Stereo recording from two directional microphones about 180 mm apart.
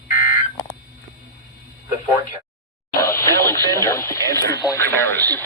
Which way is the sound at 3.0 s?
50° left (ahead or behind).